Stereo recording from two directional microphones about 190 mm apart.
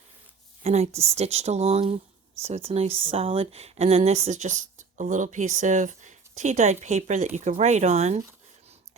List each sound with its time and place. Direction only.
0.6 s speech: 35° right (ahead or behind)